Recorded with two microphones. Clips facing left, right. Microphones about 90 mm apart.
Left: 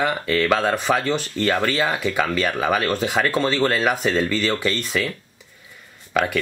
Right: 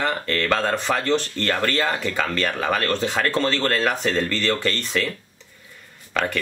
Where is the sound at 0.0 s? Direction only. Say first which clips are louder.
Left 3 dB; 5° left (ahead or behind).